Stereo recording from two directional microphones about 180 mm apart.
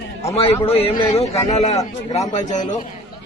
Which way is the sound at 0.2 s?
35° left (ahead or behind).